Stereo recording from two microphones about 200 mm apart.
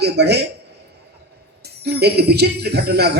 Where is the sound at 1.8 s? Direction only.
55° right (ahead or behind).